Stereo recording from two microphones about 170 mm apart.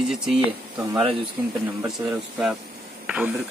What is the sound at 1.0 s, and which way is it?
Speech, 30° right (ahead or behind).